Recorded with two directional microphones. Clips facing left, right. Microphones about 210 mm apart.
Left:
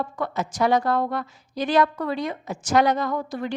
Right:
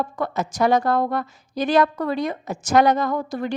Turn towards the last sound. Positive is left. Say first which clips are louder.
# right 3 dB
turn(degrees=-45)  # may be behind; listen again after turning